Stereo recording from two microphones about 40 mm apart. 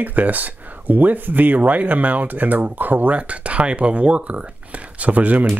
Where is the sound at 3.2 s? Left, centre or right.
Right.